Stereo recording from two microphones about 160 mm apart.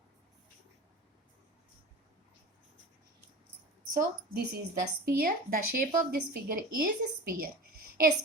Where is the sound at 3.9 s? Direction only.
65° right (ahead or behind).